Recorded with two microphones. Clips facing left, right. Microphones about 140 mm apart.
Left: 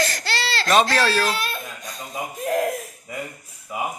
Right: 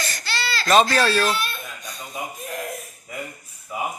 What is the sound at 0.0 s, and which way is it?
Baby cry, 90° left.